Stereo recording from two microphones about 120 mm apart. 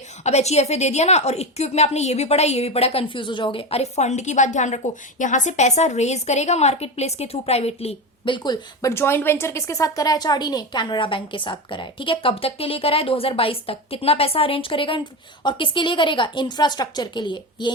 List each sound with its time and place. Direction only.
0.3 s a woman's voice: 65° left (ahead or behind); by 8.5 s 45° left (ahead or behind)
8.8 s a woman's voice: 20° left (ahead or behind); by 17.7 s 40° left (ahead or behind)